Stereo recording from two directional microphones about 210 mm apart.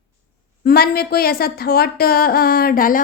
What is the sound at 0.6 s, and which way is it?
Speech, 45° left (ahead or behind).